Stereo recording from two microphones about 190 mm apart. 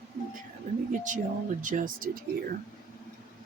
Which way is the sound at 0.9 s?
40° right (ahead or behind).